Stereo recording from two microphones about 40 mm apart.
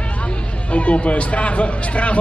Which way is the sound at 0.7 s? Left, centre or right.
Left.